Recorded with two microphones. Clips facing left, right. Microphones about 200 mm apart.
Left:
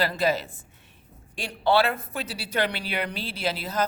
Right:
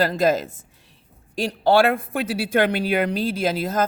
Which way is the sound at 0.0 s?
45° right (ahead or behind).